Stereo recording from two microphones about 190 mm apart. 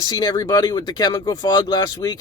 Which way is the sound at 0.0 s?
20° left (ahead or behind).